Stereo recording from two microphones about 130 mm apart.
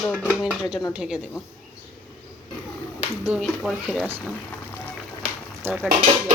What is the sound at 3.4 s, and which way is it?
Speech, 5° left (ahead or behind).